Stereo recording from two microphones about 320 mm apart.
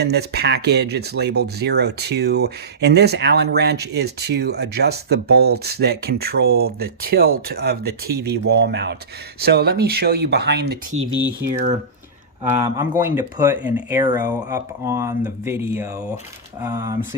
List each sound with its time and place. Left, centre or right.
0.0 s speech: right
12.5 s speech: centre